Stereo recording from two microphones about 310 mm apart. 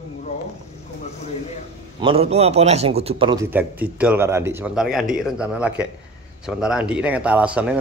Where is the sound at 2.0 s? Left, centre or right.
Centre.